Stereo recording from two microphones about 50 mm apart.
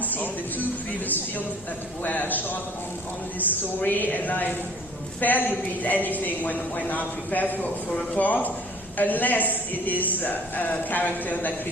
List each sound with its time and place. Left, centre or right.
0.0 s a sound: left
2.0 s a man's voice: left
3.8 s a man's voice: left